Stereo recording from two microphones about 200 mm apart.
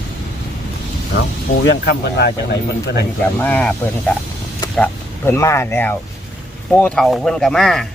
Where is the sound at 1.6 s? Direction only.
55° left (ahead or behind).